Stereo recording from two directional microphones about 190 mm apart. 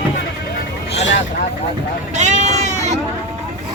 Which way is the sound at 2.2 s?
40° right (ahead or behind).